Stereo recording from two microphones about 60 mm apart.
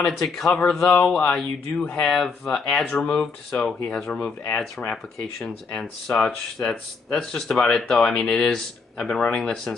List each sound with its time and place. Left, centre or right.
0.0 s speech: centre
2.9 s speech: centre